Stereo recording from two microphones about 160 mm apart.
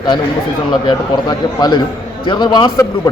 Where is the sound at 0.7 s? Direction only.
25° left (ahead or behind).